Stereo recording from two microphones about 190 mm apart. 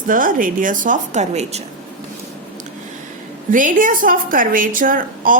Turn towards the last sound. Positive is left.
turn(degrees=-45)  # may be behind; listen again after turning